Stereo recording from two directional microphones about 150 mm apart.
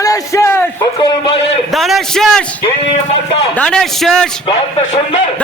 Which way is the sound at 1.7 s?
Centre (ahead or behind).